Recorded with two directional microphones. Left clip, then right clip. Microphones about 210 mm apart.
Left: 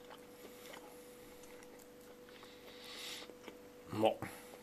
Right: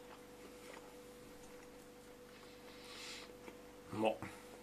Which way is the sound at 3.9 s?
45° left (ahead or behind).